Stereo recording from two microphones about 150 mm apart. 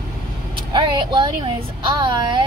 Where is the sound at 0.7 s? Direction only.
30° right (ahead or behind).